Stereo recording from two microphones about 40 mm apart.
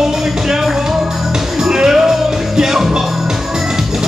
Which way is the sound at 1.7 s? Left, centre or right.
Centre.